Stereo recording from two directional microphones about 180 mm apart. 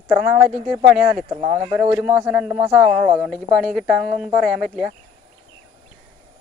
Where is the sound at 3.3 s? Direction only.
Centre (ahead or behind).